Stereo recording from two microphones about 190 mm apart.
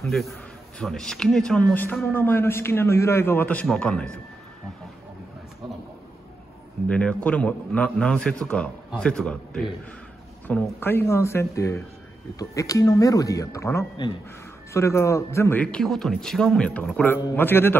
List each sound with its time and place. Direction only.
0.0 s a man's voice: centre (ahead or behind)
6.9 s a man's voice: 5° left (ahead or behind)